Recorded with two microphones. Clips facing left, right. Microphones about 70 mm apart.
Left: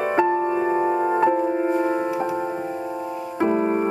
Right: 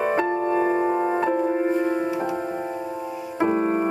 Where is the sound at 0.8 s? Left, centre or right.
Centre.